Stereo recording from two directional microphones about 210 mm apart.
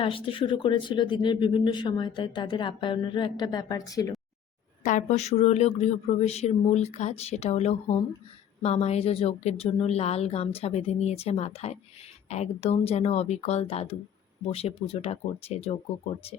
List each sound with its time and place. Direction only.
0.0 s speech: 25° left (ahead or behind)
4.8 s speech: 35° left (ahead or behind)